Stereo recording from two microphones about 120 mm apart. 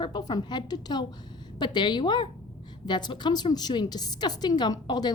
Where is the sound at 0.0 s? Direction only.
35° left (ahead or behind).